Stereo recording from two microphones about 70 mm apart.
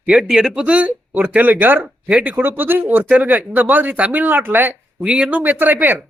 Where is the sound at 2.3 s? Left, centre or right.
Right.